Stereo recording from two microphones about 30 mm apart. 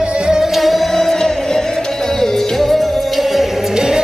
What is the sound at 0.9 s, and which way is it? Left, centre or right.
Music, centre.